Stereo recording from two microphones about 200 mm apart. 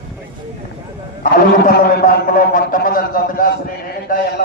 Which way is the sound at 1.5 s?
45° left (ahead or behind).